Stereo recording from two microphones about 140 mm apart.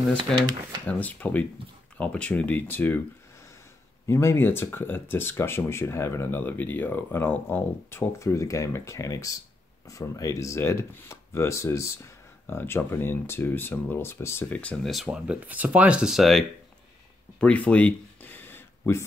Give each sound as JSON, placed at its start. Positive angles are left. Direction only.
{"t": 0.8, "sound": "speech", "side_deg": 10}
{"t": 4.1, "sound": "speech", "side_deg": 20}
{"t": 17.4, "sound": "a sound", "side_deg": 10}